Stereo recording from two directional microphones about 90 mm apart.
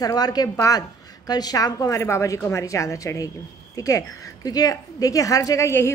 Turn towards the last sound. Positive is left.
turn(degrees=40)  # may be behind; listen again after turning